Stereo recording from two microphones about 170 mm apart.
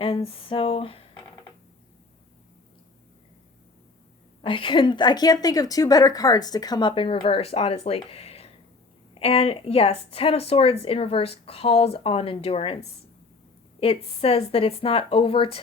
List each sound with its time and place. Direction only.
0.0 s a woman's voice: 35° left (ahead or behind)
4.4 s a woman's voice: 30° left (ahead or behind)